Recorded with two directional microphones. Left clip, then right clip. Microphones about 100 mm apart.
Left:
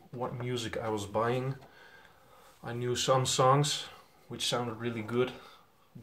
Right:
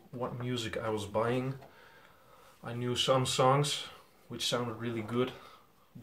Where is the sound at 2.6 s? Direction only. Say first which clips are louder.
Left 1 dB; 20° left (ahead or behind).